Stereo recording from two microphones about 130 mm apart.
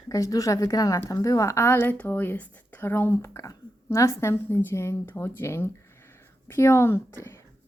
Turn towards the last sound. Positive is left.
turn(degrees=20)  # may be behind; listen again after turning